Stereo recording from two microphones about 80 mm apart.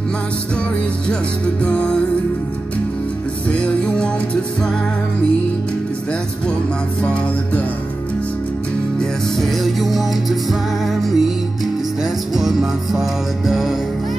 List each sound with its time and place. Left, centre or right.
1.0 s music: centre
3.4 s music: centre
9.0 s music: centre